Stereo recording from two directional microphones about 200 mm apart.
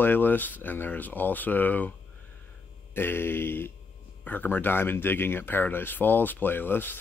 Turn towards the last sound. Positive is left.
turn(degrees=10)  # may be behind; listen again after turning